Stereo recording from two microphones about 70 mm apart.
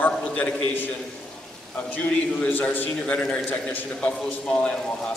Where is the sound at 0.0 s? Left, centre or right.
Centre.